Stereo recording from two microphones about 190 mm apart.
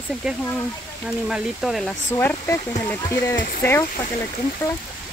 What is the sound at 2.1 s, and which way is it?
Speech, 10° left (ahead or behind).